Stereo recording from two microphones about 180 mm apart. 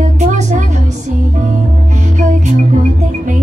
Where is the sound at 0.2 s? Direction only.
40° right (ahead or behind).